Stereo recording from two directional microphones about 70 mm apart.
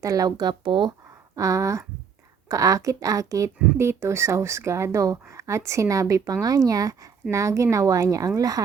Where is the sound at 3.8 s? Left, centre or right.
Right.